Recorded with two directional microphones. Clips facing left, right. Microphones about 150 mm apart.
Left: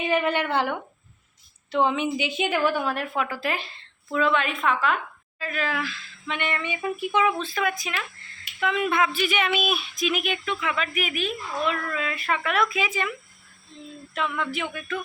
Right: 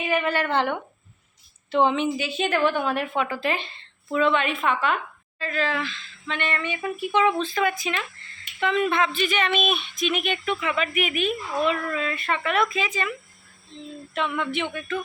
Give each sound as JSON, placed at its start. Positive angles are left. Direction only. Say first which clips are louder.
{"t": 0.1, "sound": "speech", "louder": "even", "side_deg": 20}
{"t": 0.4, "sound": "speech", "louder": "right 1 dB", "side_deg": 10}
{"t": 2.1, "sound": "speech", "louder": "right 1 dB", "side_deg": 15}